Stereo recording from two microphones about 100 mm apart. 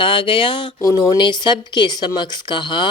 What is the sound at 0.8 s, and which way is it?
Speech, 40° left (ahead or behind).